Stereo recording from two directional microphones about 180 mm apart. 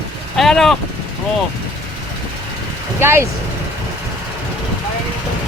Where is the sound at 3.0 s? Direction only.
15° right (ahead or behind).